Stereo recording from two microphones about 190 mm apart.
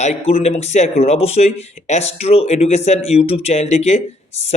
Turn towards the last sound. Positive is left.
turn(degrees=35)  # may be behind; listen again after turning